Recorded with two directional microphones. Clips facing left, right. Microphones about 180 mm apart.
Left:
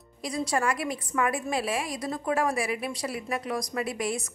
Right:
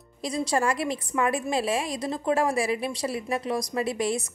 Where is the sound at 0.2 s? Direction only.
25° right (ahead or behind).